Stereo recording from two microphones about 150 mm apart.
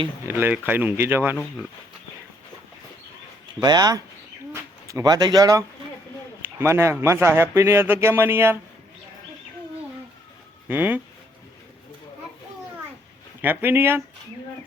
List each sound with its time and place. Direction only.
0.3 s speech: 15° right (ahead or behind)
3.6 s speech: 25° right (ahead or behind)
10.7 s speech: 10° right (ahead or behind)
13.4 s speech: 15° right (ahead or behind)